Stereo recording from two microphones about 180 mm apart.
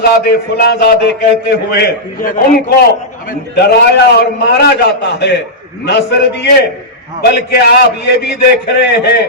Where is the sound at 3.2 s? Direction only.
65° left (ahead or behind).